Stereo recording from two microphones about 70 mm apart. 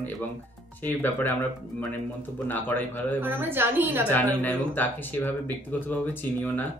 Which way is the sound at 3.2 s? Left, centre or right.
Right.